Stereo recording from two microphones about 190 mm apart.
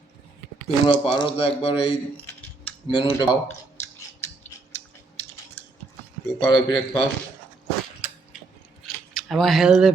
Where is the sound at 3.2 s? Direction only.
15° left (ahead or behind).